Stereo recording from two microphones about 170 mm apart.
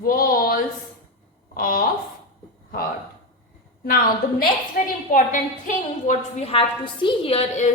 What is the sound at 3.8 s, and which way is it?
A woman's voice, 65° left (ahead or behind).